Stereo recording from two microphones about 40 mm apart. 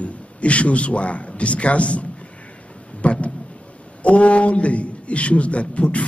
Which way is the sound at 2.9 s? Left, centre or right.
Left.